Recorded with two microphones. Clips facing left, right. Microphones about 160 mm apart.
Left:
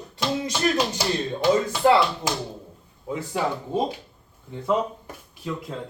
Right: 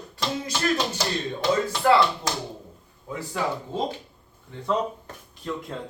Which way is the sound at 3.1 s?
20° left (ahead or behind).